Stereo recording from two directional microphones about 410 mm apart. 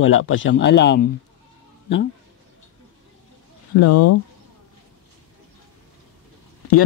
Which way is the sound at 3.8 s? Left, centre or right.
Left.